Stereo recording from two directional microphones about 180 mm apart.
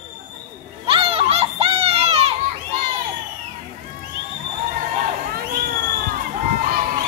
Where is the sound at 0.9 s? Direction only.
30° right (ahead or behind).